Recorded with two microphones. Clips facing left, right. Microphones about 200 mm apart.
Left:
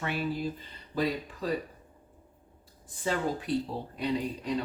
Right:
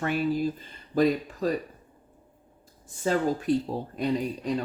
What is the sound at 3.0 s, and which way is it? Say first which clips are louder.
Speech: right 5 dB; 45° right (ahead or behind).